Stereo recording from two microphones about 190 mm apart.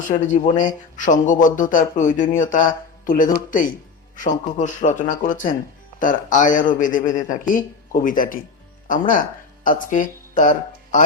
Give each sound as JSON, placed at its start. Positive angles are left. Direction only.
{"t": 0.1, "sound": "speech", "side_deg": 40}